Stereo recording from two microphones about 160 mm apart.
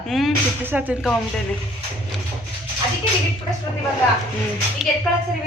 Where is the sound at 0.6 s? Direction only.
10° right (ahead or behind).